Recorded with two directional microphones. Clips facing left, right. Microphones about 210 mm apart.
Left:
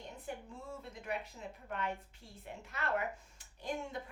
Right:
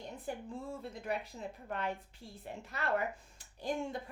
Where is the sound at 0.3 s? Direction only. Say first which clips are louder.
Right 4 dB; 35° right (ahead or behind).